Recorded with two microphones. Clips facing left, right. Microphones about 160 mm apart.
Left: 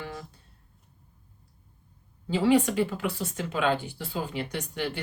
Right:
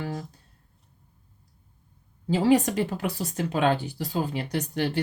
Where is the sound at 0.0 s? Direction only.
40° right (ahead or behind).